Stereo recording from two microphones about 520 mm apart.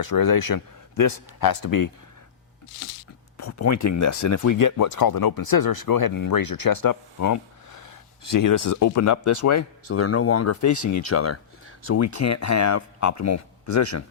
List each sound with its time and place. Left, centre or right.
0.0 s speech: left
3.3 s speech: left